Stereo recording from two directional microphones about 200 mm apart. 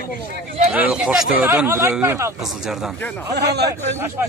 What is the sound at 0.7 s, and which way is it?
Speech, 5° right (ahead or behind).